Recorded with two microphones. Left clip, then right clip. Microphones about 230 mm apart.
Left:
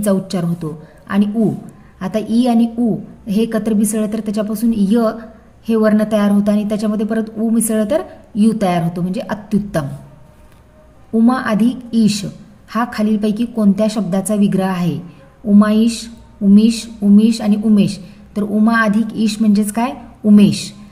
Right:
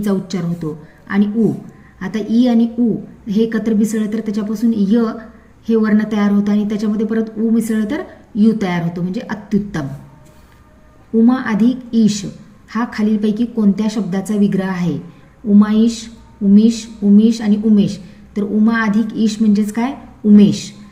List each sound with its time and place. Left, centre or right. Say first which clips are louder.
0.0 s a woman's voice: left 3 dB; left
11.2 s a woman's voice: even; left